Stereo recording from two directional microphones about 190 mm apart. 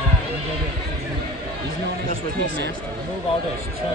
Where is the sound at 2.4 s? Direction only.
50° right (ahead or behind).